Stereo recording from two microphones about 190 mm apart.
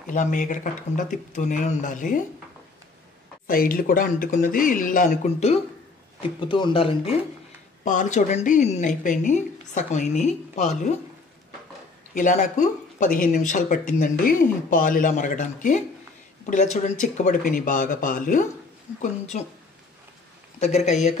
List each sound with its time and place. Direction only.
0.0 s speech: 40° left (ahead or behind)
3.4 s speech: 50° left (ahead or behind)
6.4 s speech: 25° left (ahead or behind)
7.8 s a woman's voice: 40° left (ahead or behind)
12.1 s a woman's voice: 40° left (ahead or behind)
20.5 s a woman's voice: 35° left (ahead or behind)